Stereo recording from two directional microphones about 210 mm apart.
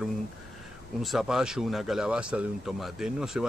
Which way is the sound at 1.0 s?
Centre (ahead or behind).